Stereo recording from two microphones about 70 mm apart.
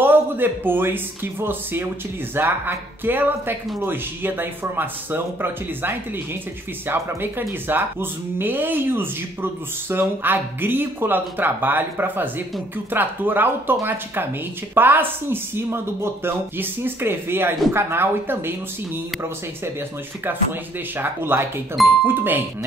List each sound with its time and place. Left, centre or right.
0.0 s speech: right
14.8 s speech: right
20.2 s speech: right